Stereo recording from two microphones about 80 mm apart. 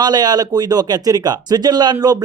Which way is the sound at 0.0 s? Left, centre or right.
Right.